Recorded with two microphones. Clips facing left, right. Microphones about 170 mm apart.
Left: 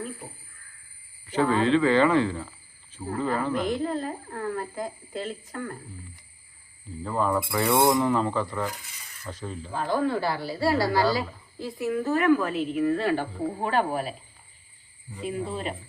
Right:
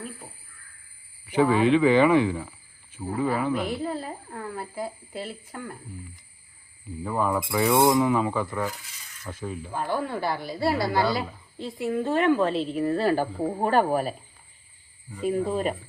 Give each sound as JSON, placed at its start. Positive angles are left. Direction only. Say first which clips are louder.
{"t": 1.3, "sound": "speech", "louder": "right 2 dB", "side_deg": -10}
{"t": 7.0, "sound": "speech", "louder": "even", "side_deg": -10}
{"t": 15.2, "sound": "speech", "louder": "right 6 dB", "side_deg": -45}